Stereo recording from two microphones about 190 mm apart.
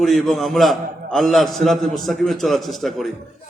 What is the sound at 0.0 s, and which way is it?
A man's voice, centre (ahead or behind).